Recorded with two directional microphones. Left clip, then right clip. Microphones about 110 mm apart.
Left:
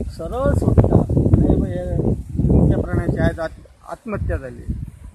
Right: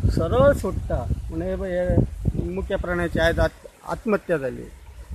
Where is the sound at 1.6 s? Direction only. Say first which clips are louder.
Right 2 dB; 10° right (ahead or behind).